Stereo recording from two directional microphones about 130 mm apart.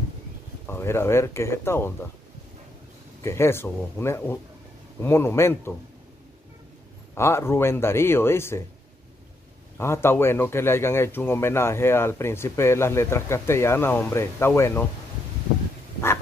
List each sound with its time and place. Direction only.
0.7 s speech: 20° left (ahead or behind)
3.2 s speech: 20° left (ahead or behind)
7.2 s speech: 20° left (ahead or behind)
9.8 s speech: 20° left (ahead or behind)